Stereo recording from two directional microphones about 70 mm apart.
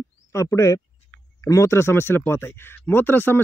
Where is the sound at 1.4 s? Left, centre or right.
Left.